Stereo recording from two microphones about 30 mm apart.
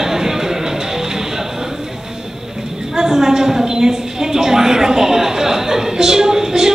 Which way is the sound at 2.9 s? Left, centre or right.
Centre.